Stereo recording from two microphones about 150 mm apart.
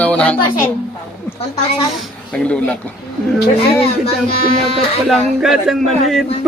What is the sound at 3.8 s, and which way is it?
Speech, 40° left (ahead or behind).